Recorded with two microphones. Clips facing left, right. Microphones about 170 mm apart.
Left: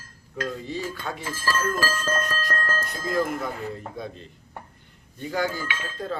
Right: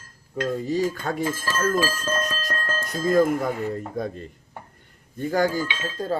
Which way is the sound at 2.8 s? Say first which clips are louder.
Right 9 dB; 45° right (ahead or behind).